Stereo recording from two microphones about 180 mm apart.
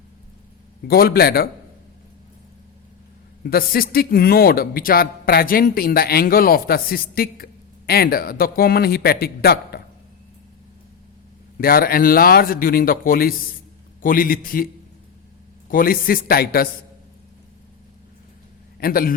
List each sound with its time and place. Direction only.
0.9 s speech: 60° left (ahead or behind)
3.4 s speech: 55° left (ahead or behind)
11.5 s a man's voice: 55° left (ahead or behind)
15.7 s speech: 55° left (ahead or behind)
18.8 s speech: 55° left (ahead or behind)